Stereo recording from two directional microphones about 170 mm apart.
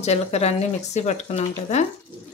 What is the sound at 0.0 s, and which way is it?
Speech, 40° left (ahead or behind).